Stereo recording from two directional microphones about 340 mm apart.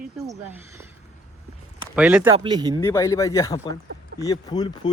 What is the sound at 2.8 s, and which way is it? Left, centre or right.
A man's voice, centre.